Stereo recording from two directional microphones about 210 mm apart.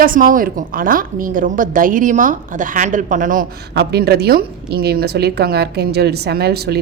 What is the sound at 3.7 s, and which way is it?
A woman's voice, 50° right (ahead or behind).